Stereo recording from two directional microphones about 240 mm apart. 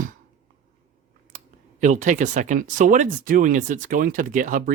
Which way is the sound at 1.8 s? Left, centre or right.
Right.